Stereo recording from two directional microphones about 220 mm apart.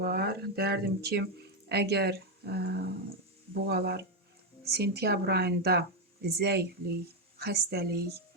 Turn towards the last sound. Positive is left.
turn(degrees=-45)  # may be behind; listen again after turning